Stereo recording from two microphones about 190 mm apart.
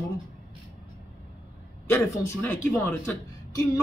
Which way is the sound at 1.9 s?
10° left (ahead or behind).